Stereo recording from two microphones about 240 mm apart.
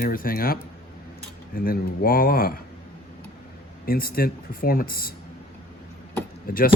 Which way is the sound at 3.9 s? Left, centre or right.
Left.